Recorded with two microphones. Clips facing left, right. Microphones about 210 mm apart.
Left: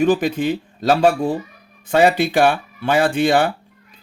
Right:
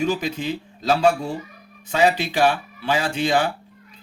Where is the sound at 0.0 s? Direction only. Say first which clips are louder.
Left 7 dB; 55° left (ahead or behind).